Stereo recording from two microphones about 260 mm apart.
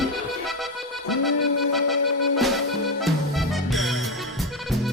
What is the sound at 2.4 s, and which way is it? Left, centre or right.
Music, centre.